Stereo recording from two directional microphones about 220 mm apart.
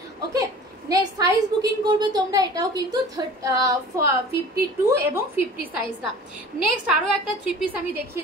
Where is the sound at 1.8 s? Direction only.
20° right (ahead or behind).